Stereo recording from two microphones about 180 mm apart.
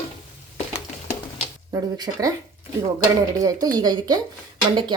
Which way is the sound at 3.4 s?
20° right (ahead or behind).